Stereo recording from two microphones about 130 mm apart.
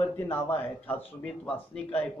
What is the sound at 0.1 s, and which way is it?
A man's voice, 15° left (ahead or behind).